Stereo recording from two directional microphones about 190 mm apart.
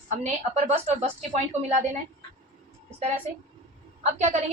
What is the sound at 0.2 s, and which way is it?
A woman's voice, 35° right (ahead or behind).